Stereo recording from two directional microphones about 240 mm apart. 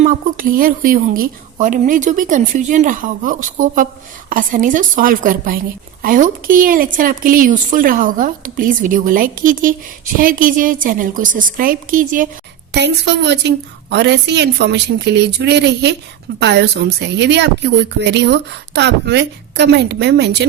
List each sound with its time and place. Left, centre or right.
0.0 s a woman's voice: right
12.7 s a woman's voice: right